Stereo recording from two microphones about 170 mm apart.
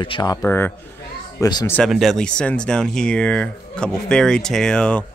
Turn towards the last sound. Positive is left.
turn(degrees=5)  # may be behind; listen again after turning